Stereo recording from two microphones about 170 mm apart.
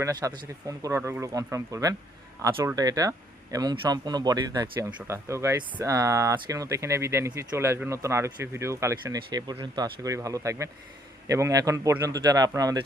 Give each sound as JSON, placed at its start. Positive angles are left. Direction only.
{"t": 0.0, "sound": "speech", "side_deg": -20}